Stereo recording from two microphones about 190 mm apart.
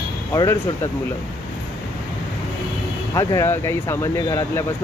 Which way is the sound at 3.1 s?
15° left (ahead or behind).